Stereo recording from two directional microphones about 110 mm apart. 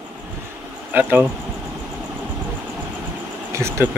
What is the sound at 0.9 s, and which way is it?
Speech, 15° right (ahead or behind).